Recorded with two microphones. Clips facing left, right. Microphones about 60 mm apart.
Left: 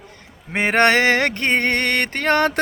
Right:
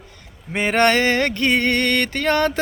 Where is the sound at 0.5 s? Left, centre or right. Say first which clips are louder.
Left 1 dB; left.